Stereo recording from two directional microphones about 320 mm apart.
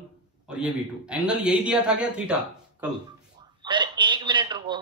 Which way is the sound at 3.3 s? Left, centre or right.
Centre.